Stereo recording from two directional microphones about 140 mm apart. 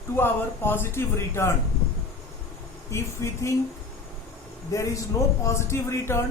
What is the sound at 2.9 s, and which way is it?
Speech, 20° left (ahead or behind).